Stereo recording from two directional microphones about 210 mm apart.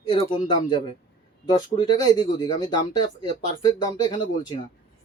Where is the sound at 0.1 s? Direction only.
20° left (ahead or behind).